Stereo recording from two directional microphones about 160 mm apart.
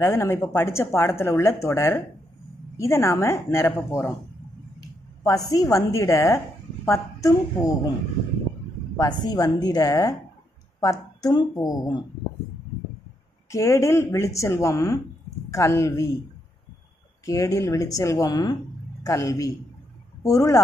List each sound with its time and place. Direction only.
0.0 s a woman's voice: 15° left (ahead or behind)
5.2 s a woman's voice: 20° left (ahead or behind)
8.9 s speech: 25° left (ahead or behind)
13.5 s a woman's voice: 20° left (ahead or behind)
17.2 s speech: 20° left (ahead or behind)